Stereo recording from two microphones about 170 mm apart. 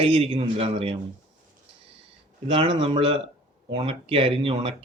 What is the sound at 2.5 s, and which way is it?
A man's voice, 30° right (ahead or behind).